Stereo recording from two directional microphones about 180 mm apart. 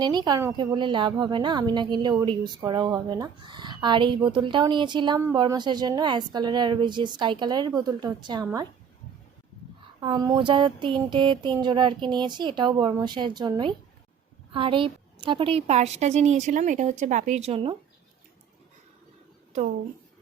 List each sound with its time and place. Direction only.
0.0 s a woman's voice: 25° right (ahead or behind)
10.0 s a woman's voice: 25° right (ahead or behind)